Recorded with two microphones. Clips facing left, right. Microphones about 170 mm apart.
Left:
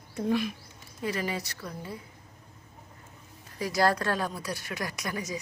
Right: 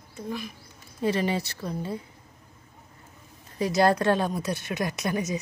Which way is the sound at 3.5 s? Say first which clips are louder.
Right 4 dB; 25° right (ahead or behind).